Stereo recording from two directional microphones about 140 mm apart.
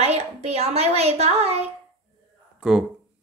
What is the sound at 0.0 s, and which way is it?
A woman's voice, 50° right (ahead or behind).